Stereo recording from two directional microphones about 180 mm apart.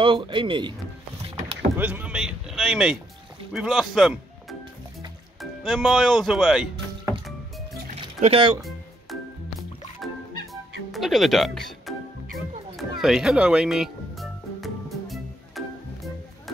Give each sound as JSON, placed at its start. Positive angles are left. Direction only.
{"t": 0.0, "sound": "speech", "side_deg": -30}
{"t": 1.8, "sound": "speech", "side_deg": -10}
{"t": 7.9, "sound": "music", "side_deg": -35}
{"t": 9.9, "sound": "music", "side_deg": 0}
{"t": 13.0, "sound": "music", "side_deg": -5}